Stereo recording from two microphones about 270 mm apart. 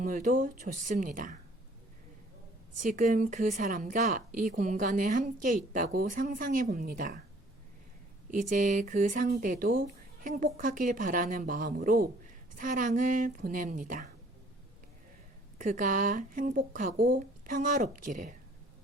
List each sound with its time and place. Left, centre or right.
0.0 s speech: right
2.7 s speech: right
8.4 s speech: right
15.5 s speech: right